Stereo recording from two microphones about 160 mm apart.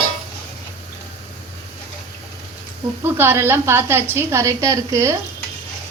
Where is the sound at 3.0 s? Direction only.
15° right (ahead or behind).